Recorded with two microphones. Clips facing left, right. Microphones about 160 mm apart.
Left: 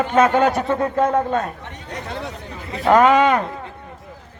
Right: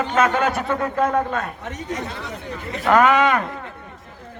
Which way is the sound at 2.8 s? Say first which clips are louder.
Left 2 dB; 30° left (ahead or behind).